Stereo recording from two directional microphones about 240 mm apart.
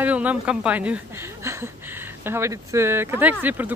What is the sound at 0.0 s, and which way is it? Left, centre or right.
A woman's voice, centre.